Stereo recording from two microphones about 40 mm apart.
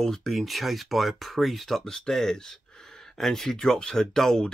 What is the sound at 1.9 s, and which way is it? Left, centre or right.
Speech, centre.